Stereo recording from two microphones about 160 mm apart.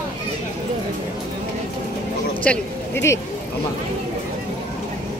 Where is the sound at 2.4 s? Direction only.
10° left (ahead or behind).